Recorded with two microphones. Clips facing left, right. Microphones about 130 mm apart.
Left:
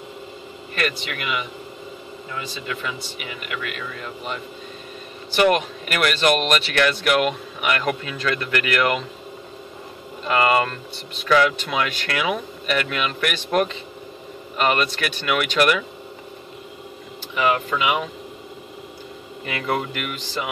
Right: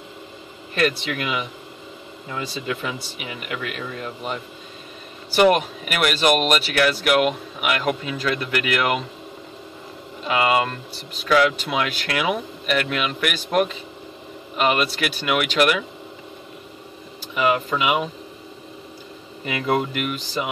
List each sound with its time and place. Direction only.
0.7 s speech: 30° right (ahead or behind)
2.5 s speech: 30° right (ahead or behind)
5.5 s speech: 10° right (ahead or behind)
10.2 s speech: 10° right (ahead or behind)
17.4 s speech: 10° right (ahead or behind)
19.4 s speech: 15° right (ahead or behind)